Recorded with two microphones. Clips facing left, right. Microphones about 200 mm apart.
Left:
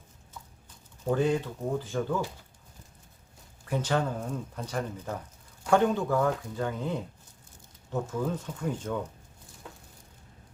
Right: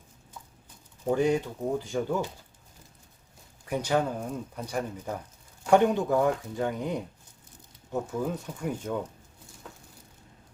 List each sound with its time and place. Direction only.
1.0 s speech: 15° right (ahead or behind)
3.7 s speech: 10° right (ahead or behind)